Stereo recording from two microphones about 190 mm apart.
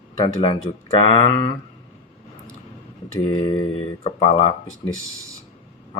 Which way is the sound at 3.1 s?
20° left (ahead or behind).